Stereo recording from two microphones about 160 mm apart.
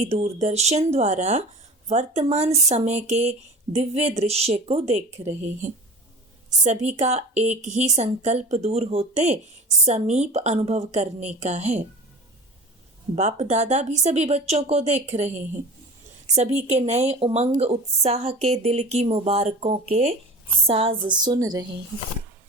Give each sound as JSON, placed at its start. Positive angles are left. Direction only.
{"t": 0.0, "sound": "speech", "side_deg": -40}
{"t": 13.1, "sound": "speech", "side_deg": -45}
{"t": 20.7, "sound": "a sound", "side_deg": -35}